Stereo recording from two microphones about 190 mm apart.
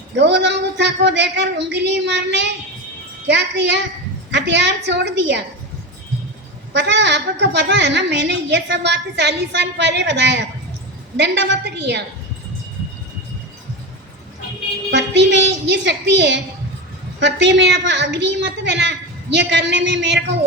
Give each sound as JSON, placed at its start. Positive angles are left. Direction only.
{"t": 0.2, "sound": "a woman's voice", "side_deg": -65}
{"t": 6.7, "sound": "a woman's voice", "side_deg": -65}
{"t": 14.8, "sound": "a woman's voice", "side_deg": -65}